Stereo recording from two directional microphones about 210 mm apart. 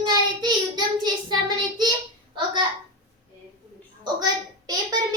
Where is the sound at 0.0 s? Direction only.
20° right (ahead or behind).